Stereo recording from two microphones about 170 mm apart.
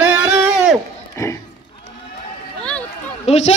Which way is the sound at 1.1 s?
15° left (ahead or behind).